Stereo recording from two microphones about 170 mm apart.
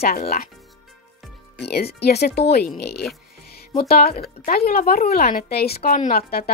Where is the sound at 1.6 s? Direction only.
70° left (ahead or behind).